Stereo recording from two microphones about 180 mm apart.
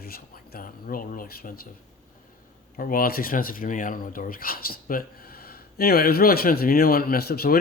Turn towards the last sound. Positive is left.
turn(degrees=55)  # may be behind; listen again after turning